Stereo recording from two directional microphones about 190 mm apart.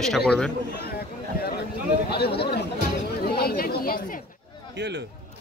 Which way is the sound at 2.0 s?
60° left (ahead or behind).